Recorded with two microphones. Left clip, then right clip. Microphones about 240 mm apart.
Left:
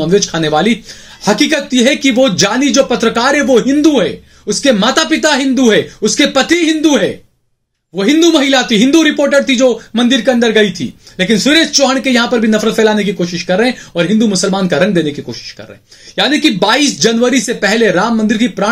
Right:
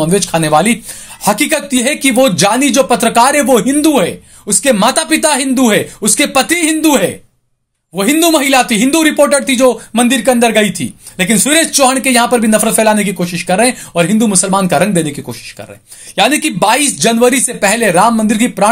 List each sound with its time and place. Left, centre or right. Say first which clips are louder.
0.1 s speech: left 1 dB; right
16.2 s speech: even; right